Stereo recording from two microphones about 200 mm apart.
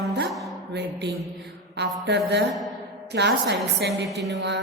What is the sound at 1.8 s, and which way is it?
A woman's voice, 60° right (ahead or behind).